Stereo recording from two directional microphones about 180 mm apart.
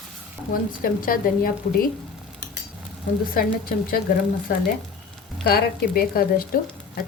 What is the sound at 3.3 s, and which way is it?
Speech, 55° left (ahead or behind).